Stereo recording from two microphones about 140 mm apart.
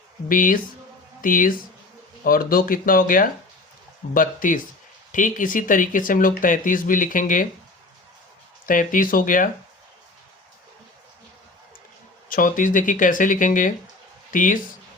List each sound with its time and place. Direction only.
0.3 s speech: 75° left (ahead or behind)
2.2 s speech: 90° left; by 7.4 s 75° left (ahead or behind)
8.6 s speech: 75° left (ahead or behind)
12.3 s speech: 75° left (ahead or behind)